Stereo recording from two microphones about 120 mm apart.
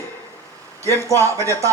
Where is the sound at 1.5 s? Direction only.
25° right (ahead or behind).